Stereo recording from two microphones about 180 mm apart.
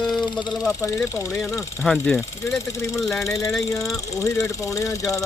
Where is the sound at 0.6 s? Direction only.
15° left (ahead or behind).